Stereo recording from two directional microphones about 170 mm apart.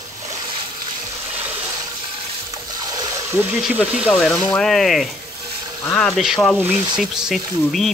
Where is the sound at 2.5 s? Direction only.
20° right (ahead or behind).